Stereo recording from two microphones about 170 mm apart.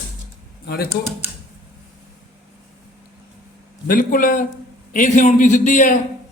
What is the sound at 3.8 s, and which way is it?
A man's voice, 55° left (ahead or behind).